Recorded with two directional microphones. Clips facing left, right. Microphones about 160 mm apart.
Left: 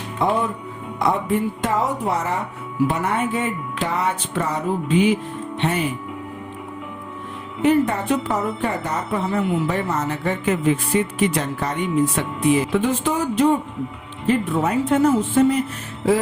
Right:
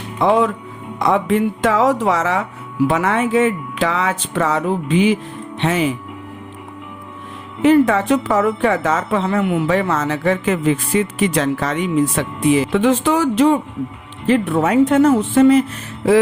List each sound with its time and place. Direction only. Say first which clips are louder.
0.3 s speech: right 9 dB; 90° right
7.6 s speech: right 5 dB; 90° right